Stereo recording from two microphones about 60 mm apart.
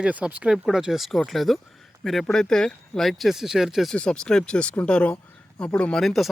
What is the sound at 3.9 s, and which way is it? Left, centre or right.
Speech, centre.